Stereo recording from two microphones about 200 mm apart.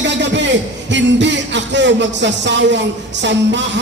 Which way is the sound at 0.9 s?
60° right (ahead or behind).